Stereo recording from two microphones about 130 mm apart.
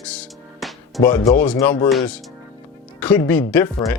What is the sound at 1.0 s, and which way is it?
Speech, 25° left (ahead or behind).